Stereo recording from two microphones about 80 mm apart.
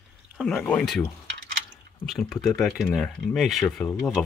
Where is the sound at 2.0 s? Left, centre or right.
Centre.